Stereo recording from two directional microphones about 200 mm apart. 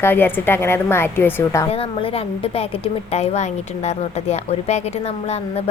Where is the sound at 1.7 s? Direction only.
30° left (ahead or behind).